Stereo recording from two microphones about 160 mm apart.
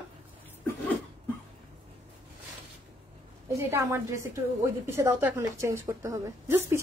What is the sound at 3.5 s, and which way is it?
A woman's voice, 15° right (ahead or behind).